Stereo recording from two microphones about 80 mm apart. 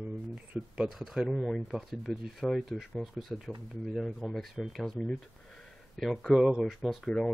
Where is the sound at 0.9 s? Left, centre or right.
Centre.